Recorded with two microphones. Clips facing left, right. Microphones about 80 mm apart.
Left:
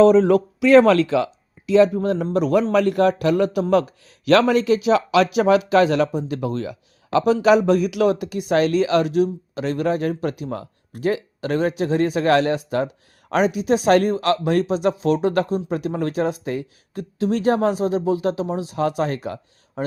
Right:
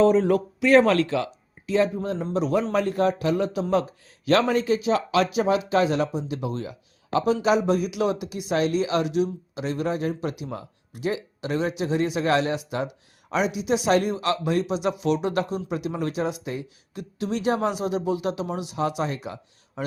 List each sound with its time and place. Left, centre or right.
0.0 s a man's voice: left
7.4 s speech: left
17.0 s speech: left
18.8 s speech: left